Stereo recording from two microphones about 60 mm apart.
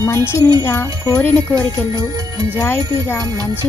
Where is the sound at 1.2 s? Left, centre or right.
Left.